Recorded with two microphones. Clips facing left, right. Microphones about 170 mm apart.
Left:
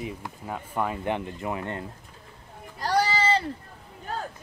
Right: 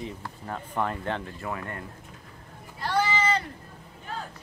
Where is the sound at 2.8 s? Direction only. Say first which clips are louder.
Left 2 dB; 40° left (ahead or behind).